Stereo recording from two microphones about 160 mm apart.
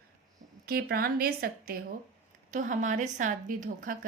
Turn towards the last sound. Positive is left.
turn(degrees=-55)  # may be behind; listen again after turning